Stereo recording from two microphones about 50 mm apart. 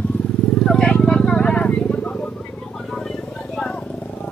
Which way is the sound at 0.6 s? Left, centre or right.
Centre.